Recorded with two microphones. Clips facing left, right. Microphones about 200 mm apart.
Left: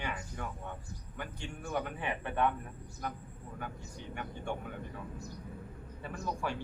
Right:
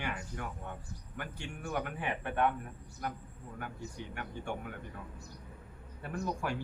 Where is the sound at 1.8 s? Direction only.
10° right (ahead or behind).